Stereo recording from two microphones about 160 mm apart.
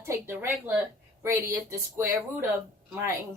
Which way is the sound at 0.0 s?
15° right (ahead or behind).